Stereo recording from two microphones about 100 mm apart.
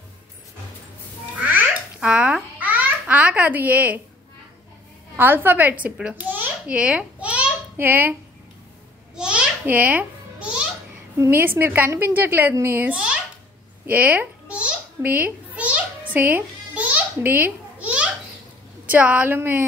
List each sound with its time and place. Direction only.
1.4 s babbling: 15° right (ahead or behind)
5.1 s a woman's voice: 20° right (ahead or behind)
6.2 s a sound: 20° right (ahead or behind)
7.7 s a woman's voice: 20° right (ahead or behind)
9.1 s babbling: 10° right (ahead or behind)
11.1 s a woman's voice: 20° right (ahead or behind)
13.8 s babbling: 15° right (ahead or behind)
18.9 s a woman's voice: 15° right (ahead or behind)